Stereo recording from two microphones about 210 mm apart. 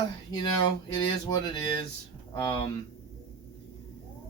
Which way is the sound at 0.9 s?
15° left (ahead or behind).